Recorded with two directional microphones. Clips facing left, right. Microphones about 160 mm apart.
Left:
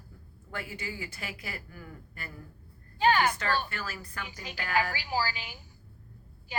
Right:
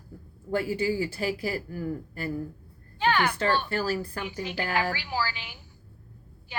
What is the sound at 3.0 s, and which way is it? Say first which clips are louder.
Speech: even; 40° left (ahead or behind).